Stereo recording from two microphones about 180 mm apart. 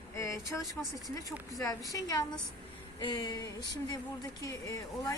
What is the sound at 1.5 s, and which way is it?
A woman's voice, 20° left (ahead or behind).